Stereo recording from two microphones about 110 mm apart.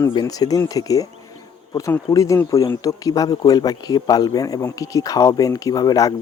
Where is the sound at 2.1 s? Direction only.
30° left (ahead or behind).